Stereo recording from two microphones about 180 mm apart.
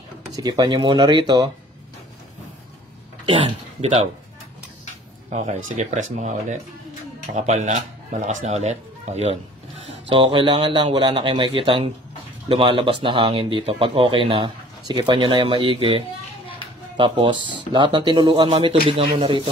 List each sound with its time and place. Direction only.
0.3 s speech: 20° right (ahead or behind)
3.3 s speech: 30° right (ahead or behind)
5.3 s speech: 40° right (ahead or behind)